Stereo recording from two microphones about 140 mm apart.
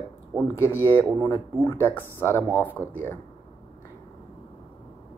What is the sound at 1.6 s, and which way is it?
Speech, 20° left (ahead or behind).